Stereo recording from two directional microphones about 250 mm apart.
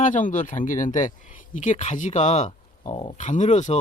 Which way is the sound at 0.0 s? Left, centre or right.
Left.